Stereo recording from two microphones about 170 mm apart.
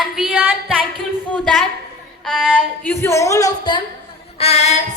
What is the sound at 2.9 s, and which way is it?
Speech, 15° left (ahead or behind).